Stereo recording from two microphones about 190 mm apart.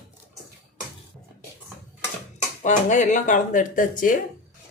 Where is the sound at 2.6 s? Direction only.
40° left (ahead or behind).